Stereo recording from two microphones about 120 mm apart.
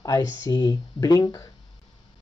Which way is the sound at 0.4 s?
35° left (ahead or behind).